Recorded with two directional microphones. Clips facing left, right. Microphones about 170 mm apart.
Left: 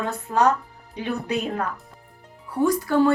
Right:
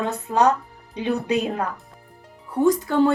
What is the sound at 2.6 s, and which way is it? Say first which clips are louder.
Speech: right 1 dB; 20° right (ahead or behind).